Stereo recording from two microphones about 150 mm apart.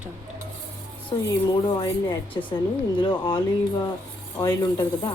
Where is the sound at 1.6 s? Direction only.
30° left (ahead or behind).